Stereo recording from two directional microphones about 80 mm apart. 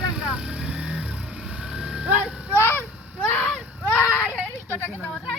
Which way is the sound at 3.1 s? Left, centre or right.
Centre.